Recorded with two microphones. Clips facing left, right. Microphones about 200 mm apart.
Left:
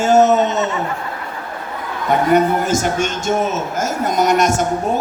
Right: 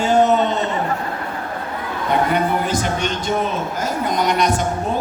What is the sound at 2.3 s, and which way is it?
A man's voice, 45° left (ahead or behind).